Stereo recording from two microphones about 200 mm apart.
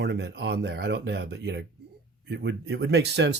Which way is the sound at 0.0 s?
60° right (ahead or behind).